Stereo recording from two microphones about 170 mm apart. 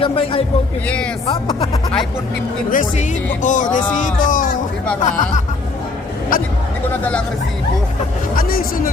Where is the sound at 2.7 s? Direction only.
50° left (ahead or behind).